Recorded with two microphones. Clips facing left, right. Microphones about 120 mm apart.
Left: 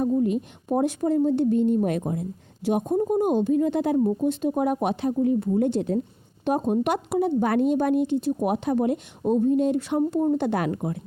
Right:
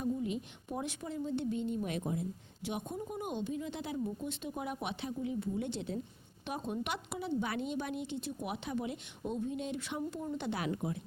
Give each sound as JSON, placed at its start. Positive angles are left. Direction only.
{"t": 0.0, "sound": "a woman's voice", "side_deg": 50}